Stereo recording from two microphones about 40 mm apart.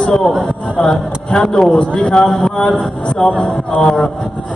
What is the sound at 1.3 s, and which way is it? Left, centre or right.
Music, centre.